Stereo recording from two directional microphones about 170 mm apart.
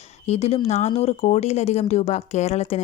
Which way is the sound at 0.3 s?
40° left (ahead or behind).